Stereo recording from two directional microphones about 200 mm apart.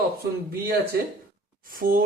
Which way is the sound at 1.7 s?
45° right (ahead or behind).